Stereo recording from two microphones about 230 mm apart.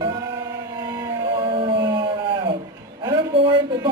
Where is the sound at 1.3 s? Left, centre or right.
Right.